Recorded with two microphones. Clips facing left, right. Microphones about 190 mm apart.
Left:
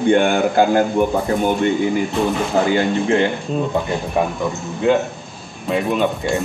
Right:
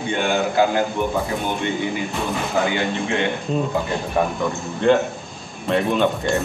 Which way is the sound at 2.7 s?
35° left (ahead or behind).